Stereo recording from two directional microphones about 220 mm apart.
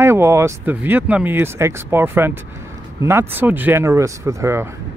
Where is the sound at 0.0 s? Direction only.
10° right (ahead or behind).